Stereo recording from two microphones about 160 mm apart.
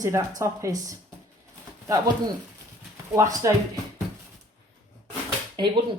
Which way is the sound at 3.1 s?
20° right (ahead or behind).